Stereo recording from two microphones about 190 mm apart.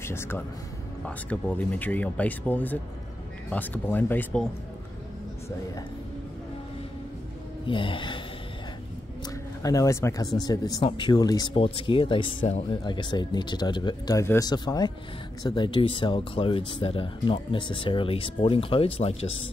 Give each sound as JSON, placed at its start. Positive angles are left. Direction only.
{"t": 0.0, "sound": "speech", "side_deg": 15}
{"t": 7.6, "sound": "speech", "side_deg": 25}
{"t": 9.6, "sound": "speech", "side_deg": 15}